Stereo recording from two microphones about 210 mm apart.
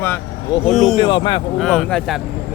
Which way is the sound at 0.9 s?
20° left (ahead or behind).